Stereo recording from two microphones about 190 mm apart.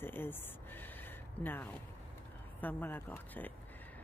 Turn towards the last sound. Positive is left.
turn(degrees=10)  # may be behind; listen again after turning